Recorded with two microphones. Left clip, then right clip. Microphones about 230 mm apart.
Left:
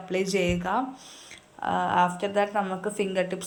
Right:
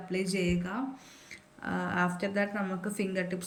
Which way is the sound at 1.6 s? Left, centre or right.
Centre.